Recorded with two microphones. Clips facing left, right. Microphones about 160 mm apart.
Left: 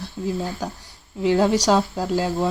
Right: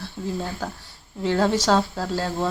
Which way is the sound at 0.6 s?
15° left (ahead or behind).